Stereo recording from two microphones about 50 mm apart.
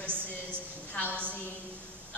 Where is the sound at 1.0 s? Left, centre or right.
Right.